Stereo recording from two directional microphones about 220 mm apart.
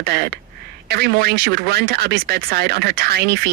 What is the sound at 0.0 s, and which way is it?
A woman's voice, 45° right (ahead or behind).